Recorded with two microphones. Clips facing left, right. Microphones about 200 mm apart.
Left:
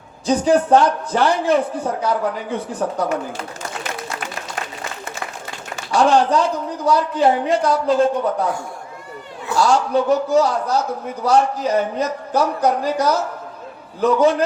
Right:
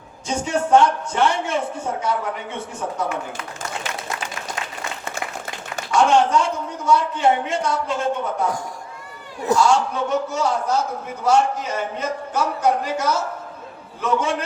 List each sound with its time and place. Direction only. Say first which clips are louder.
0.3 s a man's voice: left 5 dB; 35° left (ahead or behind)
5.9 s a man's voice: left 1 dB; 35° left (ahead or behind)
9.5 s a man's voice: right 1 dB; 40° right (ahead or behind)
9.9 s a man's voice: left 7 dB; 35° left (ahead or behind)